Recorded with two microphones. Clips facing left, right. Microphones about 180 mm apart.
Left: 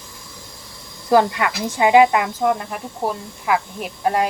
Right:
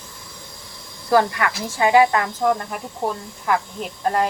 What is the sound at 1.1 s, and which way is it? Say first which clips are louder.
Speech: left 2 dB; 20° left (ahead or behind).